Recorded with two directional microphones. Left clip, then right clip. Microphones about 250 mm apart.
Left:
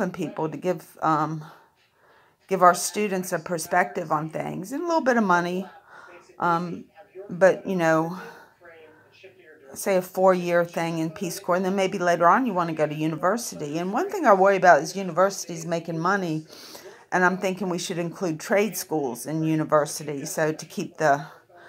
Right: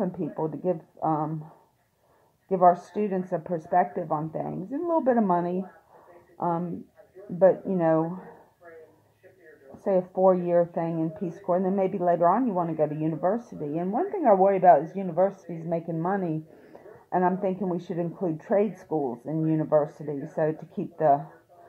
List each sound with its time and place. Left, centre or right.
1.0 s speech: centre
2.9 s speech: centre
9.8 s speech: centre
18.9 s speech: left
19.2 s speech: centre